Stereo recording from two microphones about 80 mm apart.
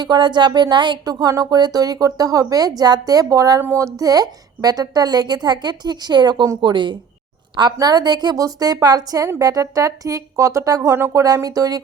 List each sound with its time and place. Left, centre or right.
0.0 s speech: right
1.3 s a woman's voice: right
6.6 s speech: right
7.8 s a woman's voice: right